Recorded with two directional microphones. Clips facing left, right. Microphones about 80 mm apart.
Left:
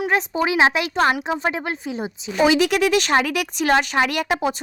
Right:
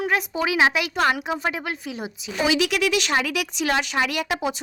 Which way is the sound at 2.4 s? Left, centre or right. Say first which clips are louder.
Left 5 dB; left.